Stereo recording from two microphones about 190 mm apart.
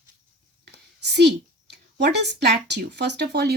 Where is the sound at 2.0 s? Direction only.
65° right (ahead or behind).